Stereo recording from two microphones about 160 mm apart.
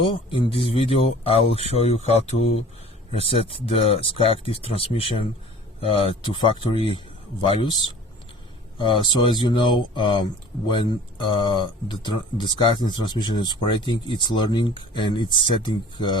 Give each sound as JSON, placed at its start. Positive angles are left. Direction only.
{"t": 0.0, "sound": "speech", "side_deg": 30}
{"t": 8.8, "sound": "speech", "side_deg": 30}